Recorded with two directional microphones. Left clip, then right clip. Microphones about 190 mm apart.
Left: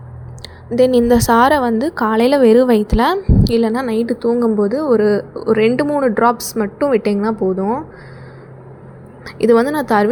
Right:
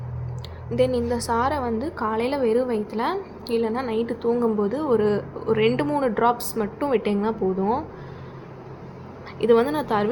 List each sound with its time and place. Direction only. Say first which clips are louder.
0.4 s a woman's voice: left 8 dB; 35° left (ahead or behind); by 7.9 s 20° left (ahead or behind)
9.2 s a woman's voice: left 6 dB; 35° left (ahead or behind)